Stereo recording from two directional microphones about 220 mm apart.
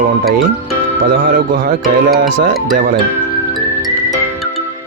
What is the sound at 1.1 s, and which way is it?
Speech, 40° right (ahead or behind).